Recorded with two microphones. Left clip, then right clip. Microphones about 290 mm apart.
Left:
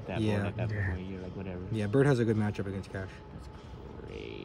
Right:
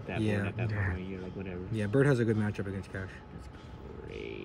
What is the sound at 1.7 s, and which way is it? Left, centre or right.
A man's voice, centre.